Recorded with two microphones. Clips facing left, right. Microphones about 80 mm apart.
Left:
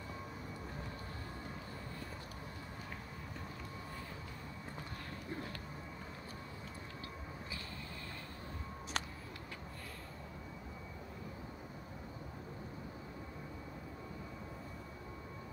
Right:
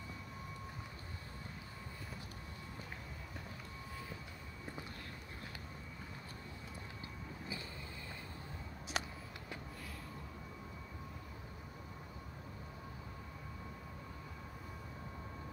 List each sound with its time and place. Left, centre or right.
9.0 s vehicle: centre